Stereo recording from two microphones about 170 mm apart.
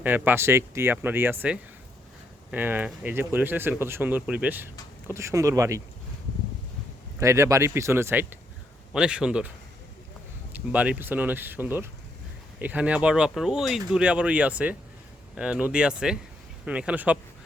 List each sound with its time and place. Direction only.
0.0 s speech: 10° right (ahead or behind)
7.2 s speech: 15° right (ahead or behind)
10.5 s speech: 10° right (ahead or behind)